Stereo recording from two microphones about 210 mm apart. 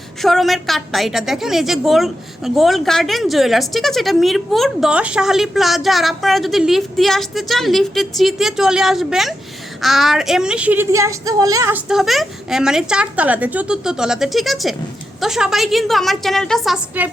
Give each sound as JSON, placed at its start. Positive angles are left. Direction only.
{"t": 0.2, "sound": "a woman's voice", "side_deg": 0}
{"t": 11.9, "sound": "a woman's voice", "side_deg": 0}